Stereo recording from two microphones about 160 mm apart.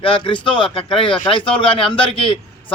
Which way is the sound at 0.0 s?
30° left (ahead or behind).